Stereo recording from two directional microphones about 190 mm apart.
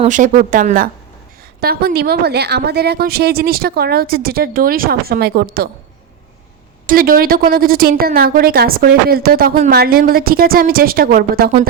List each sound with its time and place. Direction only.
0.0 s a woman's voice: 40° right (ahead or behind)
6.8 s a woman's voice: 50° right (ahead or behind)